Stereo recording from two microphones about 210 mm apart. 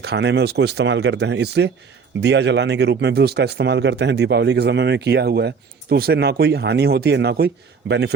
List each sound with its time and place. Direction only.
0.0 s speech: 50° right (ahead or behind)